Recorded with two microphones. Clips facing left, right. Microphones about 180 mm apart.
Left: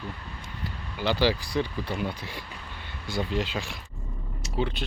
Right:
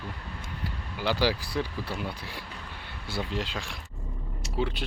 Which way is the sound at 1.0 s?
5° right (ahead or behind).